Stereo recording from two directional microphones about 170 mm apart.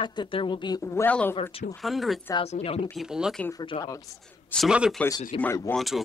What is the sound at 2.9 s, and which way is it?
Speech, 5° right (ahead or behind).